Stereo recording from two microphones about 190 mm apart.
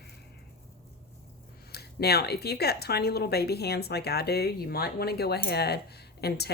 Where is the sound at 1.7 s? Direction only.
55° left (ahead or behind).